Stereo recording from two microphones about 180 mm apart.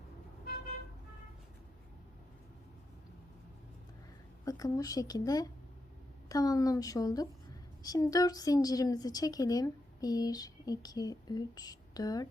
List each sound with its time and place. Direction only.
4.4 s a woman's voice: 20° left (ahead or behind)